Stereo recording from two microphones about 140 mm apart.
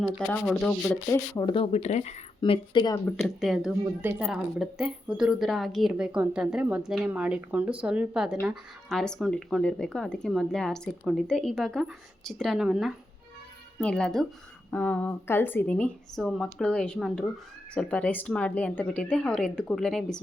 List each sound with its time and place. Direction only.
0.3 s speech: 5° left (ahead or behind)
0.9 s a woman's voice: 15° left (ahead or behind)
1.4 s speech: 30° left (ahead or behind)
1.6 s speech: 50° left (ahead or behind)
2.4 s speech: 35° left (ahead or behind)
3.2 s a woman's voice: centre (ahead or behind)